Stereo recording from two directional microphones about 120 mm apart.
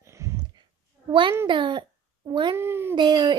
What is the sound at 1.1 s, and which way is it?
A child's voice, 40° right (ahead or behind).